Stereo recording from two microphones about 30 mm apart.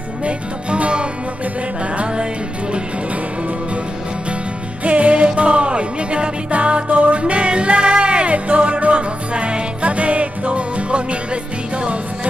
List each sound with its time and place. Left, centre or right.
0.2 s music: right
4.8 s music: right
6.5 s music: right